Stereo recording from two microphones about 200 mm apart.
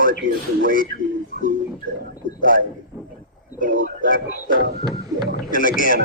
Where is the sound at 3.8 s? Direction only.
45° left (ahead or behind).